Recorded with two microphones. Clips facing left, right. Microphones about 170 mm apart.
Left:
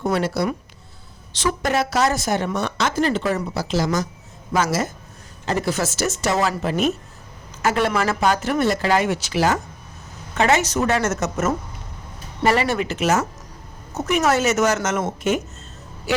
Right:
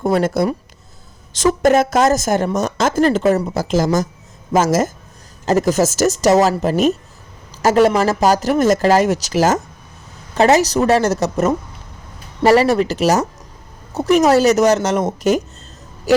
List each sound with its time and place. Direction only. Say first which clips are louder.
0.0 s a woman's voice: right 5 dB; 50° right (ahead or behind)